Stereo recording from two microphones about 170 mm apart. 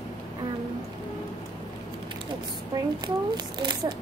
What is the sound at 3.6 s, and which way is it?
Speech, 25° right (ahead or behind).